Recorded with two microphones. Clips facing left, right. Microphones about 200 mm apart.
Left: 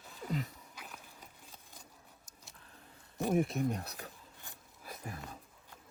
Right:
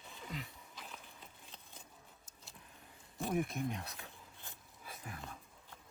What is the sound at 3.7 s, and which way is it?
Speech, 40° left (ahead or behind).